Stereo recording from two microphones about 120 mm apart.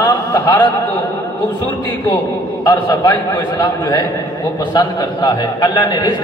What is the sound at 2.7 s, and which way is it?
A man's voice, 35° left (ahead or behind).